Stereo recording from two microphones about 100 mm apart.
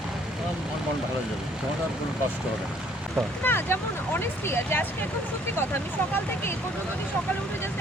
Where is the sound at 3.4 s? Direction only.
20° left (ahead or behind).